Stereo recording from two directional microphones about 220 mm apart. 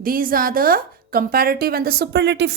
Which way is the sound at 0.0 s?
40° right (ahead or behind).